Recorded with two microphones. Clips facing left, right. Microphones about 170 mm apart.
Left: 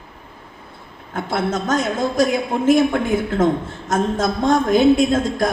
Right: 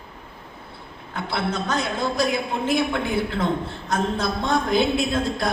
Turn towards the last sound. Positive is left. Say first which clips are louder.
# left 5 dB
turn(degrees=45)  # may be behind; listen again after turning